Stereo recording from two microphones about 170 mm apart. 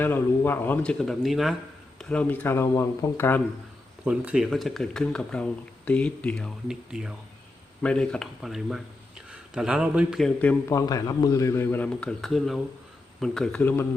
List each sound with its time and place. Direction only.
0.0 s a man's voice: 10° left (ahead or behind)
4.0 s speech: 5° right (ahead or behind)
10.7 s a man's voice: 20° left (ahead or behind)